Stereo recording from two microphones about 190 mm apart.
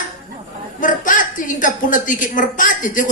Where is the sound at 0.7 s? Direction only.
45° left (ahead or behind).